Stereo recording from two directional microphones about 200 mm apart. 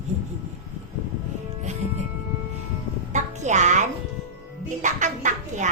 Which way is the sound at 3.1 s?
35° right (ahead or behind).